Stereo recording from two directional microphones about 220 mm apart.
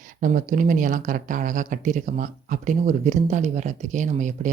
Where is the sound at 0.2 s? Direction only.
35° right (ahead or behind).